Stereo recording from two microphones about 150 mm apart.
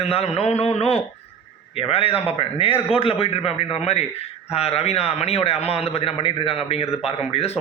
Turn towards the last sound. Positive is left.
turn(degrees=40)  # may be behind; listen again after turning